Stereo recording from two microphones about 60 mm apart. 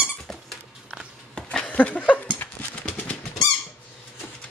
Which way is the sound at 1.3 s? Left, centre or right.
Centre.